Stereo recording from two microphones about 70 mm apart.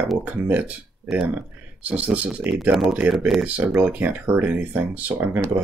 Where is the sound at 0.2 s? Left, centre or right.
Right.